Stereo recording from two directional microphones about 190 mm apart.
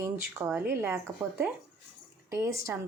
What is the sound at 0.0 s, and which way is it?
Speech, 15° right (ahead or behind).